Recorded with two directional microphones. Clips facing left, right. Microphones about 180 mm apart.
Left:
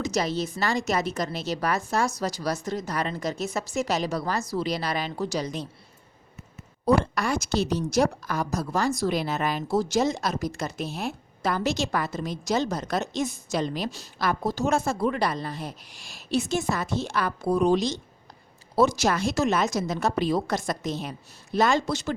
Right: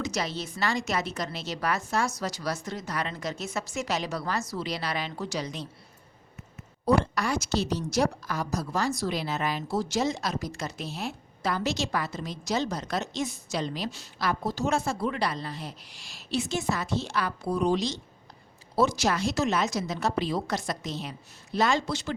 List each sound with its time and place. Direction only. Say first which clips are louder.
0.1 s a woman's voice: left 5 dB; 40° left (ahead or behind)
6.8 s a woman's voice: left 2 dB; 50° left (ahead or behind)